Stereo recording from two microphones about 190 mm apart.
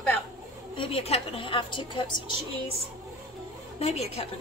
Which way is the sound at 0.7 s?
30° left (ahead or behind).